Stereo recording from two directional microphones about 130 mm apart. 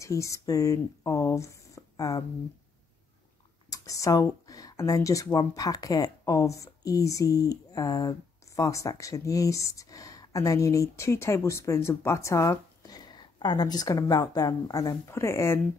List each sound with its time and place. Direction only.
0.0 s speech: 25° left (ahead or behind)
3.7 s speech: 25° left (ahead or behind)